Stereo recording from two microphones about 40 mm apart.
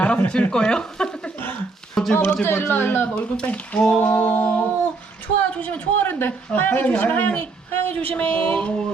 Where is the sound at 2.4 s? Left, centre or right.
Left.